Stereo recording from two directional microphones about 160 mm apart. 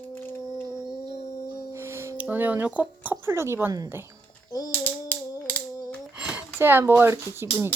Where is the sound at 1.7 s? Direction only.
15° right (ahead or behind).